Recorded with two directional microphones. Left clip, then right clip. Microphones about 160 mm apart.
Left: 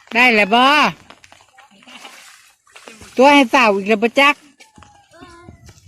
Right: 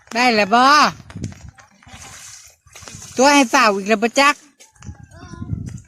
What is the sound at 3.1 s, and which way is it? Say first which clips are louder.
Speech: left 2 dB; 10° right (ahead or behind).